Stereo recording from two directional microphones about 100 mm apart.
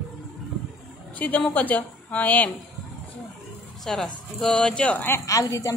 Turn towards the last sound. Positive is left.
turn(degrees=35)  # may be behind; listen again after turning